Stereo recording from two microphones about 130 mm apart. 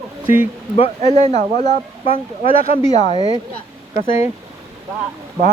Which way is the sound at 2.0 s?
45° left (ahead or behind).